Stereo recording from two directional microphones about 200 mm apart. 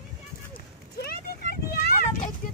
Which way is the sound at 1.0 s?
50° left (ahead or behind).